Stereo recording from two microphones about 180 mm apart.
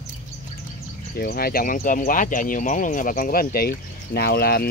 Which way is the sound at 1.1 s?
60° left (ahead or behind).